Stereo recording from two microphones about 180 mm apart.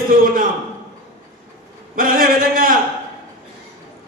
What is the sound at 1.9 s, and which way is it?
Speech, 50° right (ahead or behind).